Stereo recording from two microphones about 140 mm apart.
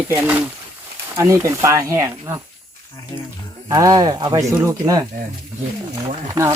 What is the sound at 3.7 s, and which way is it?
Speech, 25° right (ahead or behind).